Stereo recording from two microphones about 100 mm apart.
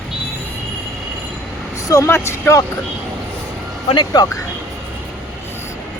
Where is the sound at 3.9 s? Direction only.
50° left (ahead or behind).